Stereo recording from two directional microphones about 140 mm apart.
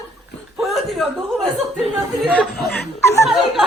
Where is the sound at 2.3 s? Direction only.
5° left (ahead or behind).